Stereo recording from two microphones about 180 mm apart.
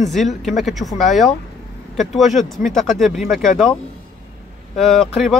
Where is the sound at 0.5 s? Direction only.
Centre (ahead or behind).